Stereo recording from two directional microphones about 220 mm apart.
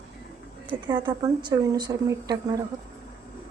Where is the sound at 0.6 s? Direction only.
20° right (ahead or behind).